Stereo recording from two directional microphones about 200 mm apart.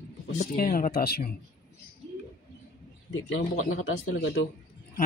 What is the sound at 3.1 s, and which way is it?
Speech, 65° left (ahead or behind).